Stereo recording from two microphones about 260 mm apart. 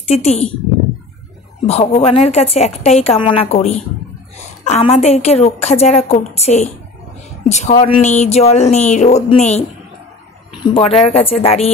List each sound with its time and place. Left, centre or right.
0.1 s a woman's voice: left
1.7 s a woman's voice: left